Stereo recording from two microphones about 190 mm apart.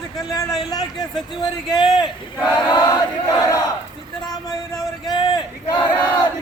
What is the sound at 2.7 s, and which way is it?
Battle cry, 20° left (ahead or behind).